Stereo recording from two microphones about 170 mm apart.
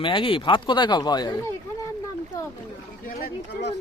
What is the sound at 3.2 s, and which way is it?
Speech, 80° left.